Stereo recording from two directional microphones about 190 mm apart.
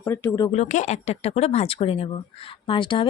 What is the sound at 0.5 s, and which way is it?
Speech, 40° left (ahead or behind).